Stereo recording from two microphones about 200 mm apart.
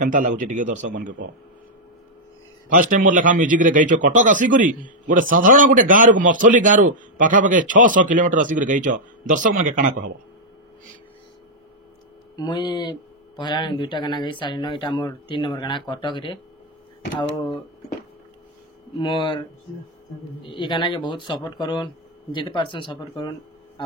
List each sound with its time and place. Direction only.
0.0 s speech: 40° right (ahead or behind)
2.7 s speech: 40° right (ahead or behind)
12.4 s speech: 20° left (ahead or behind)
18.9 s speech: 25° left (ahead or behind)
20.4 s speech: 25° left (ahead or behind)